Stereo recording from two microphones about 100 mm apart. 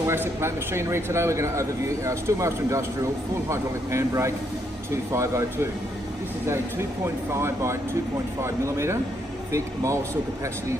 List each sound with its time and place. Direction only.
0.0 s a man's voice: 25° right (ahead or behind)